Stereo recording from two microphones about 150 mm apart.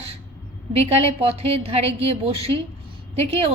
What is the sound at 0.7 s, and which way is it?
A woman's voice, 40° right (ahead or behind).